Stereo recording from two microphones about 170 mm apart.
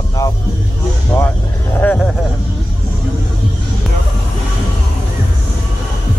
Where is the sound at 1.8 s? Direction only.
10° left (ahead or behind).